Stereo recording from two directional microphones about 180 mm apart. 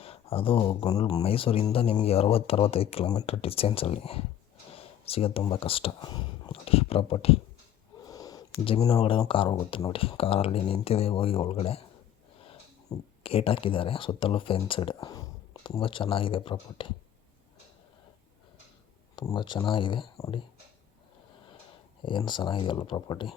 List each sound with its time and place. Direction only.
0.0 s speech: 30° left (ahead or behind)
8.0 s a sound: 20° left (ahead or behind)
8.9 s speech: 30° left (ahead or behind)
14.9 s speech: 20° left (ahead or behind)
19.1 s speech: 25° left (ahead or behind)
22.0 s speech: 25° left (ahead or behind)